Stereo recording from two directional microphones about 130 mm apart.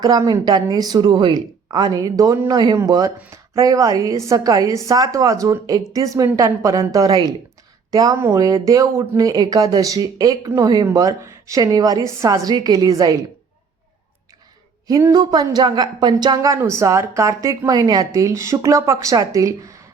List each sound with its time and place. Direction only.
0.0 s speech: 30° right (ahead or behind)
14.8 s speech: 25° right (ahead or behind)